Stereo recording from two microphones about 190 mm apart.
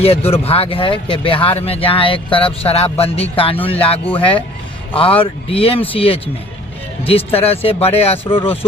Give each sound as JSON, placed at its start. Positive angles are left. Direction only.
{"t": 0.0, "sound": "speech", "side_deg": 30}